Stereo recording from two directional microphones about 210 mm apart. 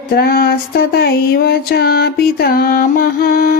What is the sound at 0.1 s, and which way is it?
Female singing, 45° left (ahead or behind).